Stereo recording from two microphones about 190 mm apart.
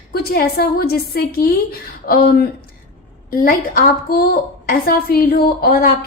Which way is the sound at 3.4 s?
50° left (ahead or behind).